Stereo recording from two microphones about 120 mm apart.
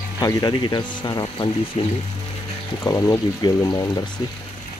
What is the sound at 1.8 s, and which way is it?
Speech, 55° left (ahead or behind).